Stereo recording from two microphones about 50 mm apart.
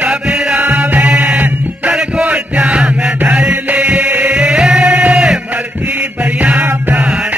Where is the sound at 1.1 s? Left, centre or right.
Centre.